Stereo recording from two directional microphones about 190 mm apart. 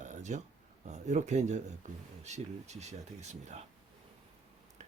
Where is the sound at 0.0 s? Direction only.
40° right (ahead or behind).